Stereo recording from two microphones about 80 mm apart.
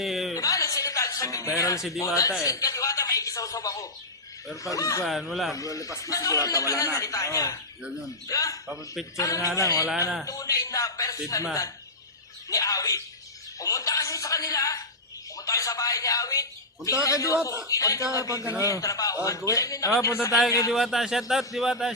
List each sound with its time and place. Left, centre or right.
0.0 s a sound: centre
0.3 s music: left
1.5 s speech: left
5.0 s speech: centre
5.5 s speech: left
8.6 s speech: centre
9.1 s speech: left
12.5 s speech: left
20.7 s speech: centre